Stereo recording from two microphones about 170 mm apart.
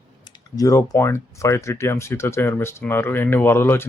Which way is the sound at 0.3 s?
25° left (ahead or behind).